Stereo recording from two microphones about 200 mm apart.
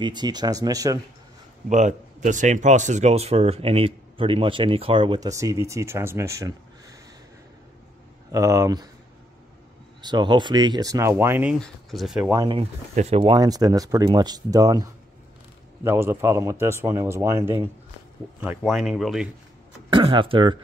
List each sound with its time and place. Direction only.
0.0 s speech: 20° right (ahead or behind)
1.7 s speech: 35° right (ahead or behind); by 7.0 s 15° right (ahead or behind)
8.3 s a man's voice: 15° right (ahead or behind)
10.0 s speech: 20° right (ahead or behind)
11.5 s speech: centre (ahead or behind)
12.3 s a man's voice: 15° right (ahead or behind)
12.5 s speech: 30° right (ahead or behind)
13.2 s a man's voice: 20° right (ahead or behind); by 19.3 s centre (ahead or behind)
19.9 s speech: 25° right (ahead or behind)